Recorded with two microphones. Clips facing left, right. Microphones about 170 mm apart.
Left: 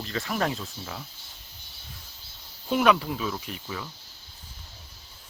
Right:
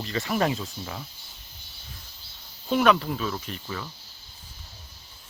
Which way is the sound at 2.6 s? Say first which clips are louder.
Right 1 dB; 5° left (ahead or behind).